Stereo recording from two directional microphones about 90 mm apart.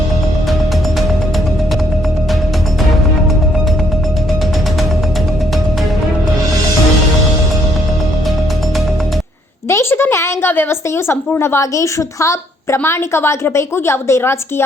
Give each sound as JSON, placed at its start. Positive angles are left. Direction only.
{"t": 9.6, "sound": "speech", "side_deg": 30}